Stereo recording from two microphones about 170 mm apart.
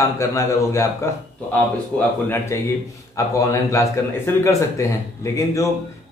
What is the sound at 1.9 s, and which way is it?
Speech, 5° left (ahead or behind).